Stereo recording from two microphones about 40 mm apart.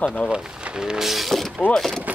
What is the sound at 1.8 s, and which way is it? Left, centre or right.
Speech, centre.